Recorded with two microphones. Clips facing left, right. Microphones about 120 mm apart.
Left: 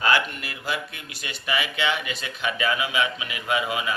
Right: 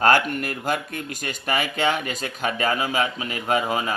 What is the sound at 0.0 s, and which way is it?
A man's voice, 50° right (ahead or behind).